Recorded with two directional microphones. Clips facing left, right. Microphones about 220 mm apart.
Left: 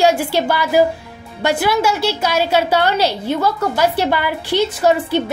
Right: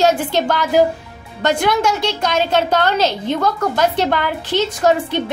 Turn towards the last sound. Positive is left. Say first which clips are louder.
# left 1 dB
turn(degrees=5)  # may be behind; listen again after turning